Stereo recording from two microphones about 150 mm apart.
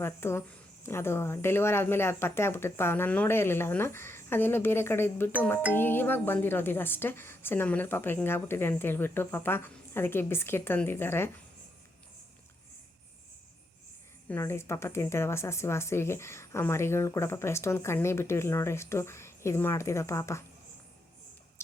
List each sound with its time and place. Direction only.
0.0 s speech: 15° left (ahead or behind)
14.3 s speech: 15° left (ahead or behind)